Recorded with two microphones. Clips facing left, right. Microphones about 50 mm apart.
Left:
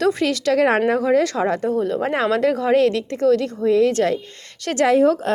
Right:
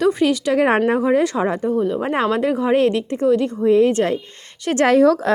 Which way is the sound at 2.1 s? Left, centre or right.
Right.